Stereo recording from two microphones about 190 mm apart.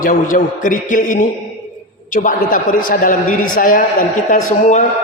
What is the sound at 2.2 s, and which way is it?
A man's voice, 45° left (ahead or behind).